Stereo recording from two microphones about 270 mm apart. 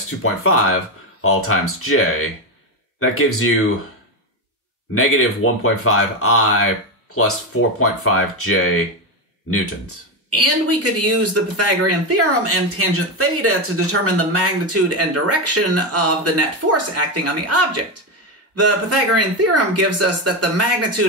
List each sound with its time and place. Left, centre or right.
0.2 s speech: left
4.9 s speech: left
8.0 s speech: left
10.3 s speech: right